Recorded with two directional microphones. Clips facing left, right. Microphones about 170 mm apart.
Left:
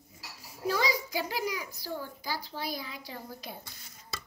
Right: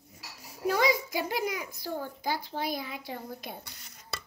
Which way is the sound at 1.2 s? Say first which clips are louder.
Right 2 dB; 50° right (ahead or behind).